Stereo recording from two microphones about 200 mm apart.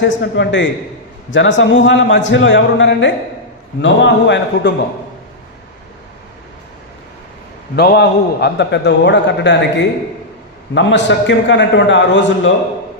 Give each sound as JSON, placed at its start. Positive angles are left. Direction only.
{"t": 0.0, "sound": "a man's voice", "side_deg": 65}
{"t": 7.7, "sound": "a man's voice", "side_deg": 55}